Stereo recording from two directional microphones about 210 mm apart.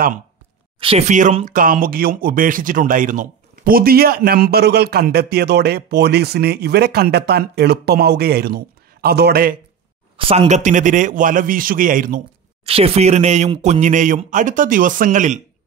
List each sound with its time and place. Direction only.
0.7 s speech: 30° right (ahead or behind); by 9.6 s 45° right (ahead or behind)
10.1 s speech: 25° right (ahead or behind); by 12.2 s 40° right (ahead or behind)
12.6 s speech: 30° right (ahead or behind)